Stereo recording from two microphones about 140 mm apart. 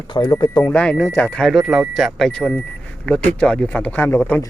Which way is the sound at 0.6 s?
10° left (ahead or behind).